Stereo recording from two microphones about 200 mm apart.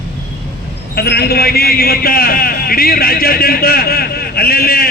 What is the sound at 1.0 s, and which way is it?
A man's voice, 50° left (ahead or behind).